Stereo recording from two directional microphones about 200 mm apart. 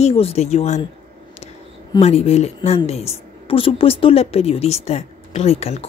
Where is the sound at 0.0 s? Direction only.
30° left (ahead or behind).